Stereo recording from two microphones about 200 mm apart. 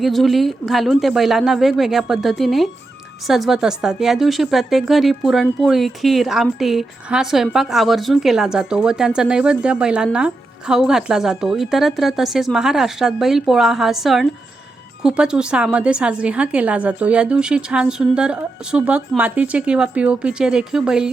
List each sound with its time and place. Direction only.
0.0 s speech: centre (ahead or behind)